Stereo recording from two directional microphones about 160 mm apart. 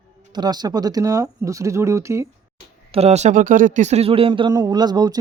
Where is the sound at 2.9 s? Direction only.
40° right (ahead or behind); by 5.2 s 25° right (ahead or behind).